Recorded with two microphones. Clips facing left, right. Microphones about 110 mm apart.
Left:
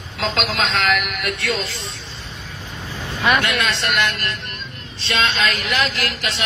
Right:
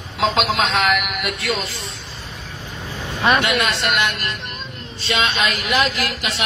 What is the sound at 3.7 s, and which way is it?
Speech, centre (ahead or behind).